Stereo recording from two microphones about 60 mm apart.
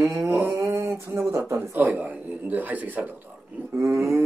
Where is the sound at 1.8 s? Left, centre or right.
Right.